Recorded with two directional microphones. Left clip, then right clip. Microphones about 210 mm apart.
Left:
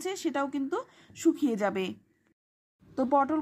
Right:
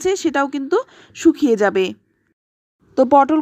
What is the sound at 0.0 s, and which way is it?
Speech, 25° right (ahead or behind).